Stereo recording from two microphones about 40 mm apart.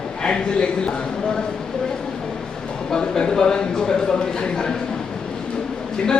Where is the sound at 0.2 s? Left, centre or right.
Left.